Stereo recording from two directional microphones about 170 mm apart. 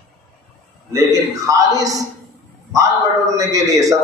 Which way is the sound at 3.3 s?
20° right (ahead or behind).